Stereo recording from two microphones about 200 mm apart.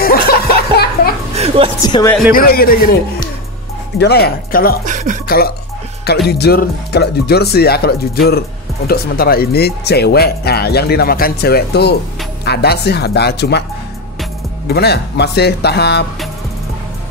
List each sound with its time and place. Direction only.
0.0 s music: 50° left (ahead or behind)
1.3 s a sound: 30° right (ahead or behind)
1.8 s speech: 20° left (ahead or behind)
2.3 s speech: 45° left (ahead or behind)
4.8 s a sound: 40° right (ahead or behind)
6.2 s speech: 55° left (ahead or behind)
14.7 s speech: 55° left (ahead or behind)